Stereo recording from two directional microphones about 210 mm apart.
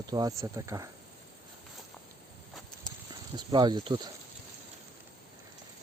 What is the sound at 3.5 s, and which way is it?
Speech, 20° right (ahead or behind).